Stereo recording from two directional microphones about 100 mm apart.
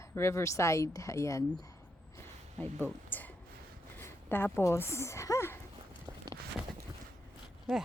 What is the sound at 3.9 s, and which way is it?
Speech, 20° left (ahead or behind).